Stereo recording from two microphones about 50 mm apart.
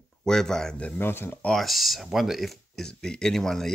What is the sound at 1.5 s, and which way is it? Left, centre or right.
Speech, centre.